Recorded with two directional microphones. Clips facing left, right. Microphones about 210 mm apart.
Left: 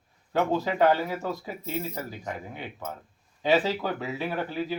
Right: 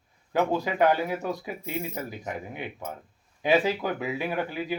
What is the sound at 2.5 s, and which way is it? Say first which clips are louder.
Speech: right 1 dB; 15° right (ahead or behind).